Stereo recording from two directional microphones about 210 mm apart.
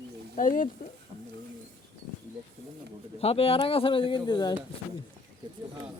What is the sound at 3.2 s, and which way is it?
Speech, 30° left (ahead or behind).